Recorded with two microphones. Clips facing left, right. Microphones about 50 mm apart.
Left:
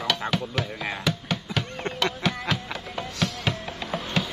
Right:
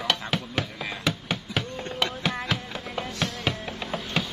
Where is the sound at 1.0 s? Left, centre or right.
Centre.